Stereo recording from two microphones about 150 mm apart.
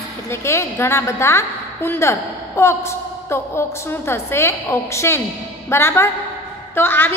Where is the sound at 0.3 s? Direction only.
20° left (ahead or behind).